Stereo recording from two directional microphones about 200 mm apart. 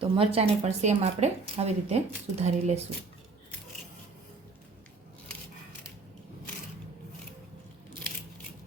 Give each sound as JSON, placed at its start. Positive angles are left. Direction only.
{"t": 0.0, "sound": "speech", "side_deg": -30}